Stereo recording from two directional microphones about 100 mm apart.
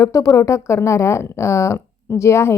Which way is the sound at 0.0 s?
35° left (ahead or behind).